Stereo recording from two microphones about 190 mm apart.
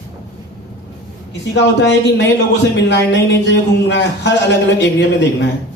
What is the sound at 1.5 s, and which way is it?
A man's voice, 65° left (ahead or behind).